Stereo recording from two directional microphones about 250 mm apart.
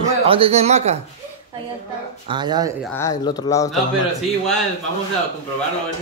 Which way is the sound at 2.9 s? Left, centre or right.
Centre.